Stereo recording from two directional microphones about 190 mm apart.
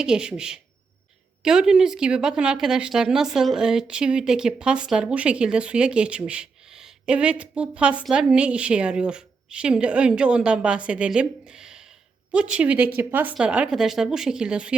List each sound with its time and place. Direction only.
0.0 s speech: 5° right (ahead or behind)